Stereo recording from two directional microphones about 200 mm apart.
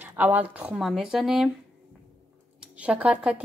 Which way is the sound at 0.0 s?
10° right (ahead or behind).